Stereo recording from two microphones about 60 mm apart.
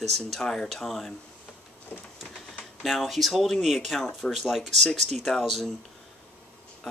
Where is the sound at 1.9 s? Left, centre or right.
Left.